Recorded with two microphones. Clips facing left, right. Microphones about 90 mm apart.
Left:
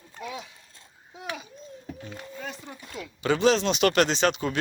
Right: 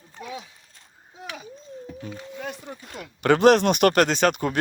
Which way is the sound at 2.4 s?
60° right (ahead or behind).